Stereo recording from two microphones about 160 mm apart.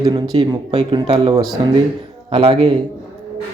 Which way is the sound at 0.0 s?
25° right (ahead or behind).